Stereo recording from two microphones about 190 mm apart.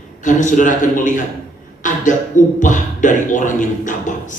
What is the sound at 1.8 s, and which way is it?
Cough, 45° left (ahead or behind).